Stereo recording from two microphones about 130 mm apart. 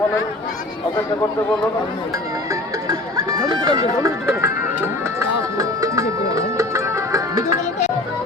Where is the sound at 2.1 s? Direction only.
25° right (ahead or behind).